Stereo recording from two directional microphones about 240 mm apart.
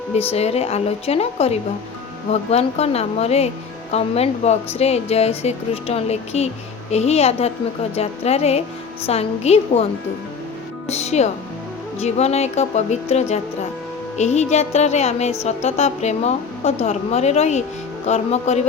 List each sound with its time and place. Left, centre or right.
0.1 s speech: left